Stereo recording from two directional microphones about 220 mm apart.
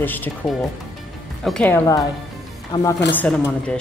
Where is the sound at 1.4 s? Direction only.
5° left (ahead or behind).